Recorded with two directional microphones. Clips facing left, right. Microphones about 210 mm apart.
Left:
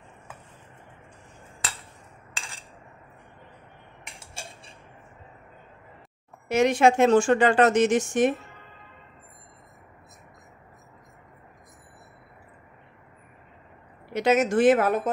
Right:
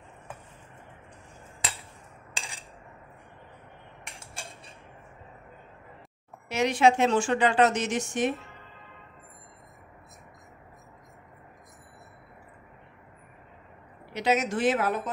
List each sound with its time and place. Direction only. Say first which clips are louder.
6.5 s speech: left 3 dB; 50° left (ahead or behind)
14.1 s speech: left 5 dB; 50° left (ahead or behind)